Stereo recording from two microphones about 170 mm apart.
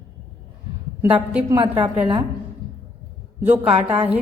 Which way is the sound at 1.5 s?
30° right (ahead or behind).